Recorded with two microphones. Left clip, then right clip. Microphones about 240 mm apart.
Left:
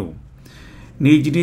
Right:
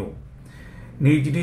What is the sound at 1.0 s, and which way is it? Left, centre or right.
Speech, left.